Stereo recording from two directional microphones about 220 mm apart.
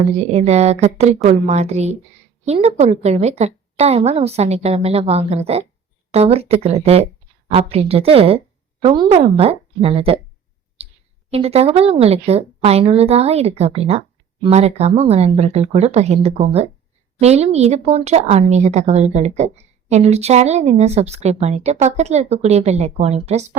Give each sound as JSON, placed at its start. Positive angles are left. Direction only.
{"t": 0.2, "sound": "a woman's voice", "side_deg": -30}
{"t": 11.3, "sound": "speech", "side_deg": -30}